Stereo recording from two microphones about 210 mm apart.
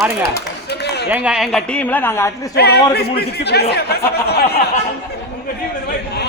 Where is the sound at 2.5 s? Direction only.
50° left (ahead or behind).